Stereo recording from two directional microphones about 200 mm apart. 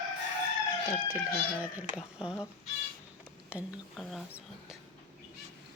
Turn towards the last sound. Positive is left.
turn(degrees=-5)  # may be behind; listen again after turning